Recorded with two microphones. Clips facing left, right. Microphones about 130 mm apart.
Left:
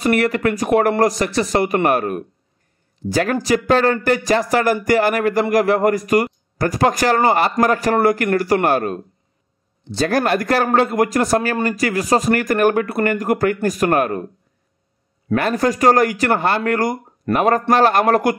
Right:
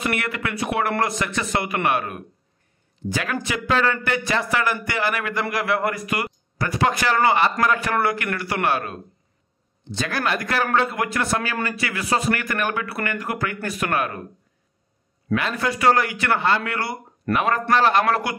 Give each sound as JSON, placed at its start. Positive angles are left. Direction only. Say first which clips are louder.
{"t": 0.0, "sound": "a man's voice", "louder": "left 9 dB", "side_deg": 40}
{"t": 15.3, "sound": "speech", "louder": "left 6 dB", "side_deg": 45}